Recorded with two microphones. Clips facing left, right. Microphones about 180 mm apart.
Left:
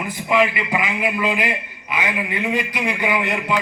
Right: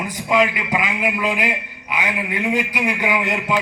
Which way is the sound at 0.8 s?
10° right (ahead or behind).